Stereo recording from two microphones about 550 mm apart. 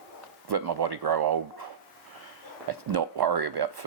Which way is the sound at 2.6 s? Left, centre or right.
Right.